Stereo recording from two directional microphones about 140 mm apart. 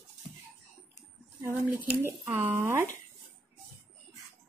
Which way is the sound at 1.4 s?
15° right (ahead or behind).